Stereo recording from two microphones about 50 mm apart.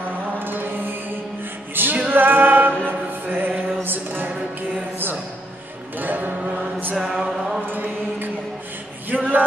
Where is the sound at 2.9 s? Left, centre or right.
Right.